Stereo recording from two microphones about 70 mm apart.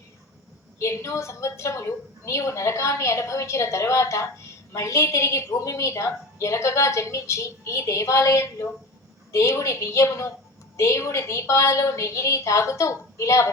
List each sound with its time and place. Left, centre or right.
0.8 s a woman's voice: left